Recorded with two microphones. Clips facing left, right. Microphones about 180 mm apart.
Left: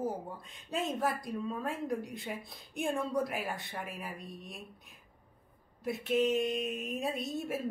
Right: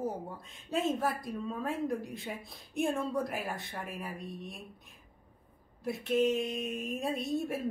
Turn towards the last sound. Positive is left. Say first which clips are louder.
# right 2 dB
turn(degrees=0)  # may be behind; listen again after turning